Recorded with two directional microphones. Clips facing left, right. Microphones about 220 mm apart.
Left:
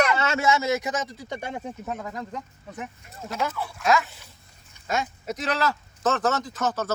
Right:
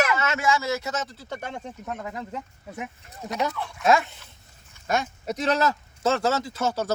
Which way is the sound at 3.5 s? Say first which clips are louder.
Even; 5° left (ahead or behind).